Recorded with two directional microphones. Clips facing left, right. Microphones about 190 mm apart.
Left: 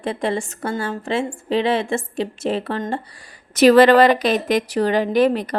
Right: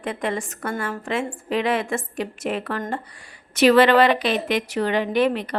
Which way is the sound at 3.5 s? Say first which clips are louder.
Left 4 dB; 40° left (ahead or behind).